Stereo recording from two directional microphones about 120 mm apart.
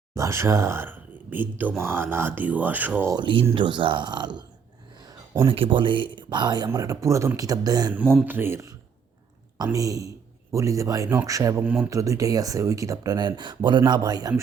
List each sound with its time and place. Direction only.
0.1 s speech: 25° right (ahead or behind)
3.1 s speech: 40° right (ahead or behind)
5.5 s speech: 45° right (ahead or behind)
6.7 s speech: 25° right (ahead or behind)
8.2 s speech: 15° right (ahead or behind)
9.7 s speech: 30° right (ahead or behind)
11.6 s speech: 10° right (ahead or behind)
11.9 s speech: 25° right (ahead or behind)